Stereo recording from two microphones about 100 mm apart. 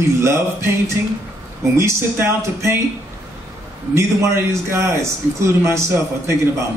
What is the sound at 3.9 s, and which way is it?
A man's voice, 25° right (ahead or behind).